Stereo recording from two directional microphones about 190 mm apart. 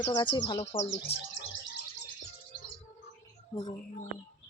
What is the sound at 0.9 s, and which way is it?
Speech, 70° left (ahead or behind).